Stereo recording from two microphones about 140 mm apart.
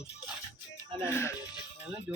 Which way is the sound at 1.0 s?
20° left (ahead or behind).